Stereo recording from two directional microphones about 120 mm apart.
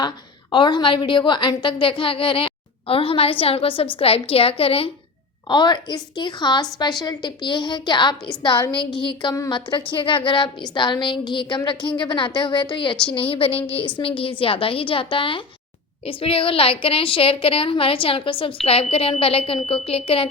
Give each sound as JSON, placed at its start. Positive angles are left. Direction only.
{"t": 0.5, "sound": "a woman's voice", "side_deg": 40}
{"t": 5.5, "sound": "a woman's voice", "side_deg": 40}